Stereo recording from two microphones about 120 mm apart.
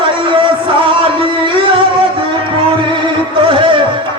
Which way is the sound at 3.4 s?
45° right (ahead or behind).